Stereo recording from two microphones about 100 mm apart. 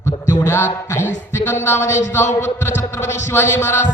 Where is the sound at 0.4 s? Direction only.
25° left (ahead or behind).